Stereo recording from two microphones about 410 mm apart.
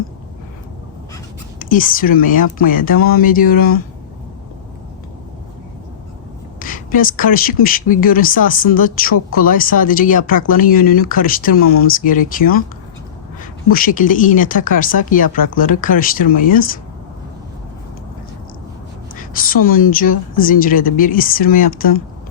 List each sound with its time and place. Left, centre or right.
1.7 s speech: centre
6.6 s speech: centre
13.7 s speech: left
19.4 s speech: centre